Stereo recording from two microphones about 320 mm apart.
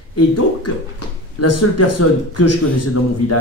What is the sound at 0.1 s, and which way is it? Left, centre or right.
Speech, left.